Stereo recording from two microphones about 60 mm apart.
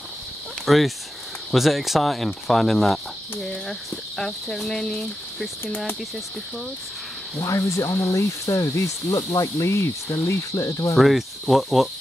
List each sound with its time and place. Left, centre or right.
0.7 s speech: centre
4.2 s cricket: centre
7.3 s speech: left
10.5 s cricket: left
11.0 s speech: centre